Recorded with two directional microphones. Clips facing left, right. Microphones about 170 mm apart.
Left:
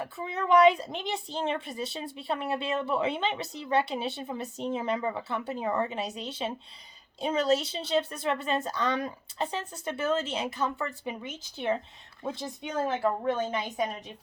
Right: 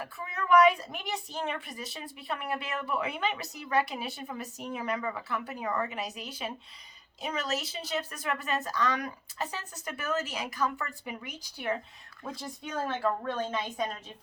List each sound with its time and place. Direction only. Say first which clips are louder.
0.0 s a woman's voice: left 4 dB; 25° left (ahead or behind)